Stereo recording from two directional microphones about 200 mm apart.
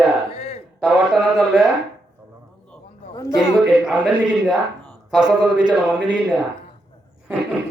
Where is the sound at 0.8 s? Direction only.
Centre (ahead or behind).